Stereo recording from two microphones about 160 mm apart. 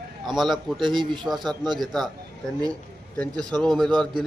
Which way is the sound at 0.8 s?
30° right (ahead or behind).